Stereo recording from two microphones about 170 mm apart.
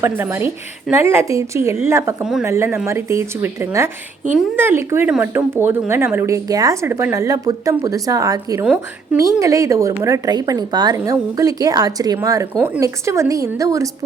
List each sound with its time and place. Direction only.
0.0 s a woman's voice: 15° right (ahead or behind)